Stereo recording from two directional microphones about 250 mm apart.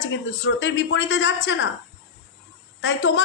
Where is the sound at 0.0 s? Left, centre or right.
Left.